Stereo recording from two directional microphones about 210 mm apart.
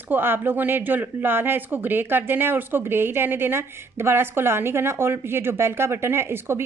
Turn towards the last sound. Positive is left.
turn(degrees=-10)  # may be behind; listen again after turning